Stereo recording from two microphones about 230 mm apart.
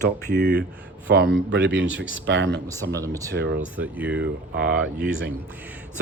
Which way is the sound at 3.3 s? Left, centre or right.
Right.